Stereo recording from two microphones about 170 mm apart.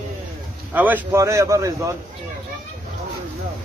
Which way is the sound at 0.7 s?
10° right (ahead or behind).